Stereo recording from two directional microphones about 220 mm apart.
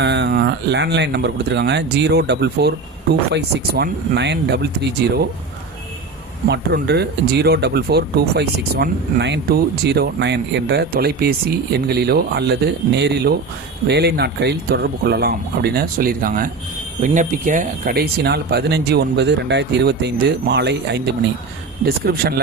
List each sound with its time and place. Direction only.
0.0 s speech: 50° right (ahead or behind)
6.5 s speech: 50° right (ahead or behind)